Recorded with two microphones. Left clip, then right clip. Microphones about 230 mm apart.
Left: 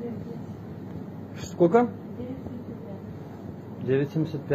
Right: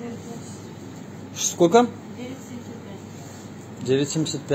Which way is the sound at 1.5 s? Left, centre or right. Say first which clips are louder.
Right 4 dB; right.